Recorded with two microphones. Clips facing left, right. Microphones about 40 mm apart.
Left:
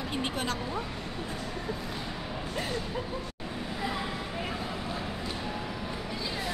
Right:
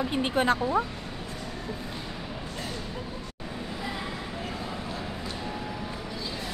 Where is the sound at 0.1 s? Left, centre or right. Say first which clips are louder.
Right 6 dB; right.